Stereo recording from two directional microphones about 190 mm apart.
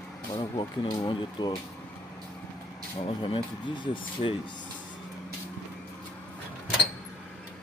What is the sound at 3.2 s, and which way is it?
Speech, 25° left (ahead or behind).